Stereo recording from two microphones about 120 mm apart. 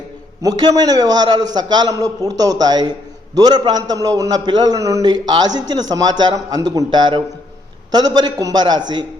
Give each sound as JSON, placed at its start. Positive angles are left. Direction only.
{"t": 0.4, "sound": "a man's voice", "side_deg": -30}